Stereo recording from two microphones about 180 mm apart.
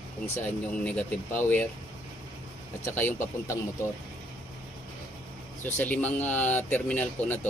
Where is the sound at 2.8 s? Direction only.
10° left (ahead or behind).